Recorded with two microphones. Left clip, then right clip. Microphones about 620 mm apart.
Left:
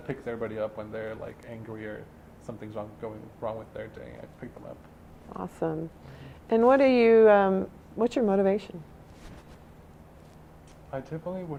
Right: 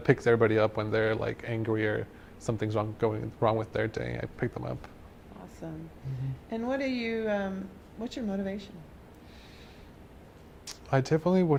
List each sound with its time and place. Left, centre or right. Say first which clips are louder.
0.1 s speech: right 11 dB; right
5.6 s speech: left 12 dB; left
10.9 s speech: right 9 dB; right